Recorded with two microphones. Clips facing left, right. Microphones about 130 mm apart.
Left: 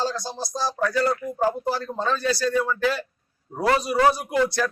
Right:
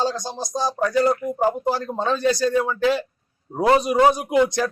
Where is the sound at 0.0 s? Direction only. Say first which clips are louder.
Right 3 dB; 15° right (ahead or behind).